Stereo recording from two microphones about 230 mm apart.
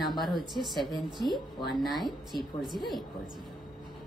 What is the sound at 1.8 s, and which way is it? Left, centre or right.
A woman's voice, centre.